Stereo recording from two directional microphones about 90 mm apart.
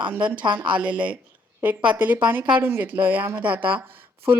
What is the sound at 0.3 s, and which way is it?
Speech, 60° right (ahead or behind).